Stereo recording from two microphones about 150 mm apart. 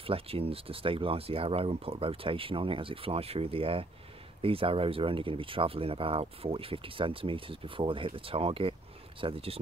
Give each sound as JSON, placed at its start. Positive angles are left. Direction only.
{"t": 0.0, "sound": "speech", "side_deg": -40}